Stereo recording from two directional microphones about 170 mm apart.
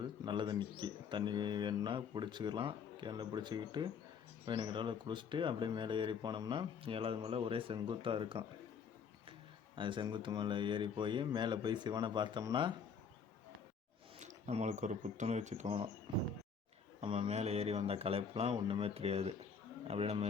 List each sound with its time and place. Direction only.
0.0 s a man's voice: 30° right (ahead or behind)
9.7 s speech: 30° right (ahead or behind)
14.2 s speech: 45° right (ahead or behind)
16.1 s a man's voice: 25° right (ahead or behind)